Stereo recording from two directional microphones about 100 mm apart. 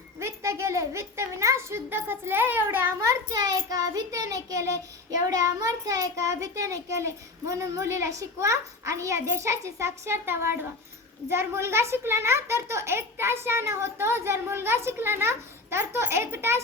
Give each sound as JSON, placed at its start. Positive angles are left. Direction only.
{"t": 0.2, "sound": "a child's voice", "side_deg": -25}